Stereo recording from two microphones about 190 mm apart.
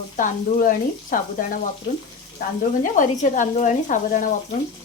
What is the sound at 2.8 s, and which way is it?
Speech, 45° left (ahead or behind).